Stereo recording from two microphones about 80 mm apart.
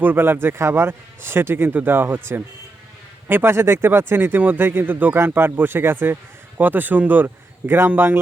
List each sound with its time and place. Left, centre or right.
0.0 s speech: right